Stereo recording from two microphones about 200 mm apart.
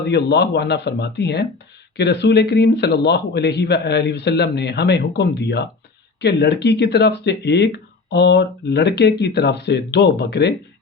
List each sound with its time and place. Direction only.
0.0 s speech: 55° left (ahead or behind)